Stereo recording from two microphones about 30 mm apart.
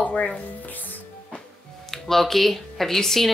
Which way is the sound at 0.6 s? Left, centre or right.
Left.